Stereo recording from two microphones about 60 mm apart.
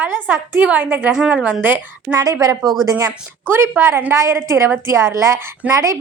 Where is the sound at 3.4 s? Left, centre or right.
Right.